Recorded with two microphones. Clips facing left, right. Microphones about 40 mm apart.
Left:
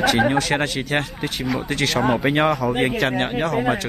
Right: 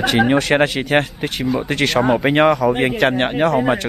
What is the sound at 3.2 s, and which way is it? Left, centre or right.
Speech, centre.